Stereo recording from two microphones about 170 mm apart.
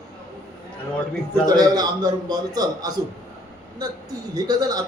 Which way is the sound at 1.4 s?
25° right (ahead or behind).